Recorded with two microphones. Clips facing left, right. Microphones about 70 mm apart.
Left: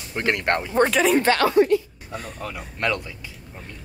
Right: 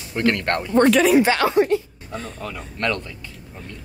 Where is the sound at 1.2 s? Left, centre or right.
Centre.